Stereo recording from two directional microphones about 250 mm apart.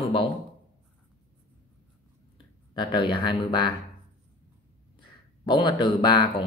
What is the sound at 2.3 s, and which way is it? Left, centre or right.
Speech, centre.